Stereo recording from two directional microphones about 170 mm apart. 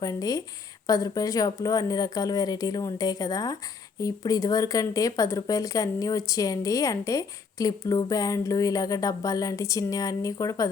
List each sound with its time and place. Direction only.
0.0 s speech: 20° left (ahead or behind)